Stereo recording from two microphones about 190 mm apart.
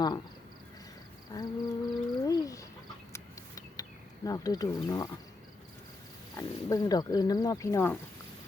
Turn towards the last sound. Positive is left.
turn(degrees=15)  # may be behind; listen again after turning